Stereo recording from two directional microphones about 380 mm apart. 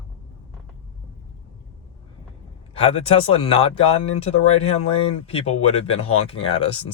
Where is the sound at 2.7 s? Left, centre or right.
Centre.